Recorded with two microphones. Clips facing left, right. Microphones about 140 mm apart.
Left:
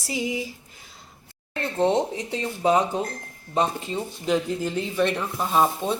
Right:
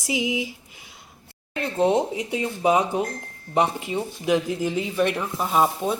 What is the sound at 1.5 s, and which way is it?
Speech, 15° right (ahead or behind).